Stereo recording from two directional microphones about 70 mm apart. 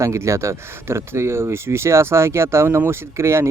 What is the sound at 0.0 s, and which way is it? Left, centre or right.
Speech, right.